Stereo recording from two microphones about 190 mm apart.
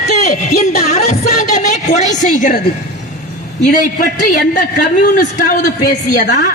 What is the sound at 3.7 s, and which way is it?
A man's voice, 50° left (ahead or behind).